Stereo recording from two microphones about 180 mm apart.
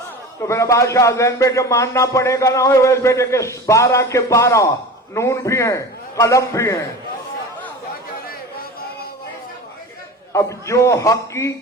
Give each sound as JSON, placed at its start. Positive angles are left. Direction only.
{"t": 0.4, "sound": "speech", "side_deg": 15}
{"t": 10.3, "sound": "speech", "side_deg": 15}